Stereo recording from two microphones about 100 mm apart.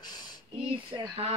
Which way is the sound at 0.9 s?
50° right (ahead or behind).